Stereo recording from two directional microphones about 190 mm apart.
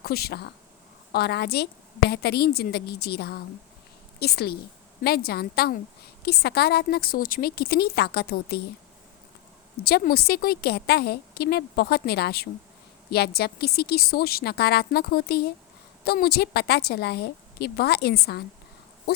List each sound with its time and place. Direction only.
0.0 s a woman's voice: 55° left (ahead or behind)
9.8 s a woman's voice: 55° left (ahead or behind)